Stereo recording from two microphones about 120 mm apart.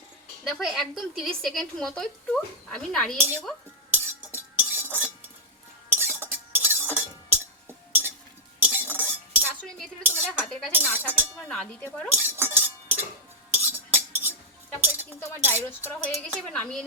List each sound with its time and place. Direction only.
0.4 s speech: centre (ahead or behind)
3.2 s speech: 15° right (ahead or behind)
3.9 s cutlery: 15° right (ahead or behind)
5.9 s chink: 15° right (ahead or behind)
8.5 s cutlery: 15° right (ahead or behind)
10.0 s dishes: 15° right (ahead or behind)
11.3 s a sound: 10° left (ahead or behind)
12.0 s cutlery: 20° right (ahead or behind)
14.8 s speech: 15° right (ahead or behind)
16.5 s a woman's voice: 5° left (ahead or behind)